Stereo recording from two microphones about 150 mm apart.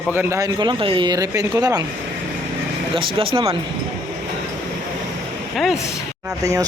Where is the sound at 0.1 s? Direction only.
15° right (ahead or behind).